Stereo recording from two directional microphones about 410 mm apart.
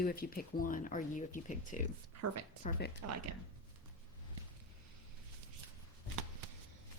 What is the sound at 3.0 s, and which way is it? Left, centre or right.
Speech, right.